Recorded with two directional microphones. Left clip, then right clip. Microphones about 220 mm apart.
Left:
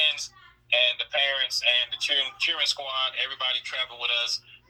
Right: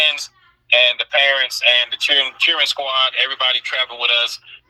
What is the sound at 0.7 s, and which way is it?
Speech, 60° right (ahead or behind).